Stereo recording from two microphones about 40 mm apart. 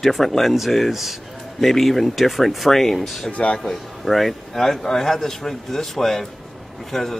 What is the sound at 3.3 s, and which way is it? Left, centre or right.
Speech, left.